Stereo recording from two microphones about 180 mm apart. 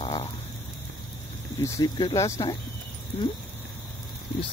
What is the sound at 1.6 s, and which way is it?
Speech, 20° left (ahead or behind).